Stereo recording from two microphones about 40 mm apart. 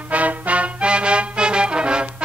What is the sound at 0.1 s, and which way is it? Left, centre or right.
Music, right.